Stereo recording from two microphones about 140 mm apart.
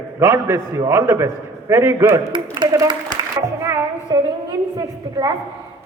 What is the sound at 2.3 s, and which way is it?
Speech, 35° right (ahead or behind).